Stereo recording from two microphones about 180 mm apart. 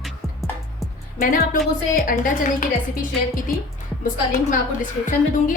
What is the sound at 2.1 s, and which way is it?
Speech, 50° left (ahead or behind).